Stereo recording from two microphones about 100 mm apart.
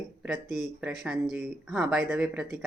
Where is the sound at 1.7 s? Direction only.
10° right (ahead or behind).